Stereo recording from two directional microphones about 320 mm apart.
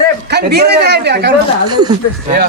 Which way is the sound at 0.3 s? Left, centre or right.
Right.